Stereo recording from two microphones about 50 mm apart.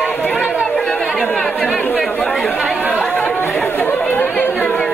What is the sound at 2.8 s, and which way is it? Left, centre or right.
Chatter, left.